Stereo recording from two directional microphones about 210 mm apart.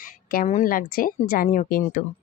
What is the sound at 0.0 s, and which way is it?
A woman's voice, 40° left (ahead or behind).